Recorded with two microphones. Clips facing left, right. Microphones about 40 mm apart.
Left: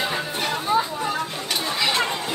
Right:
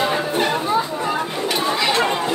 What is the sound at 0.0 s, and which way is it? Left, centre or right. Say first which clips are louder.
Chatter: right 6 dB; right.